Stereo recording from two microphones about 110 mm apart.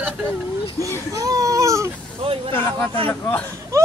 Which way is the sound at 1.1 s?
30° right (ahead or behind).